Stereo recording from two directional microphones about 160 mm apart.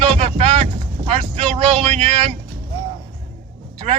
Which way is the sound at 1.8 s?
40° right (ahead or behind).